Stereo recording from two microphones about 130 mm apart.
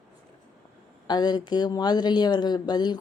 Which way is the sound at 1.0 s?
30° left (ahead or behind).